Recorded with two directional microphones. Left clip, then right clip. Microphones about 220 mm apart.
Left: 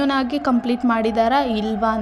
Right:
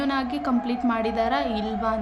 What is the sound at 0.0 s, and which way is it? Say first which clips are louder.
A woman's voice: left 6 dB; 30° left (ahead or behind).